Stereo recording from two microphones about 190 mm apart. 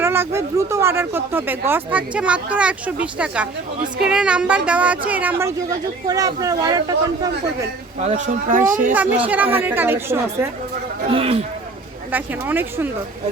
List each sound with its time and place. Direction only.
0.0 s speech: 10° right (ahead or behind)
8.4 s speech: 45° right (ahead or behind)
8.9 s speech: 10° right (ahead or behind)
11.1 s speech: 30° right (ahead or behind)
12.1 s speech: 10° right (ahead or behind)